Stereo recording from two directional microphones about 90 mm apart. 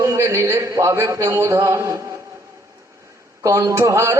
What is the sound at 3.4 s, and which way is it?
Speech, 35° right (ahead or behind).